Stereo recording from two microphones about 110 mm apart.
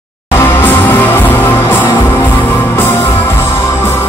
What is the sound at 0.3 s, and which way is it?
Music, 20° left (ahead or behind).